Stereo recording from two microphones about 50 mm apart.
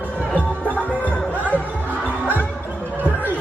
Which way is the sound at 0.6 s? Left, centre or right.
Left.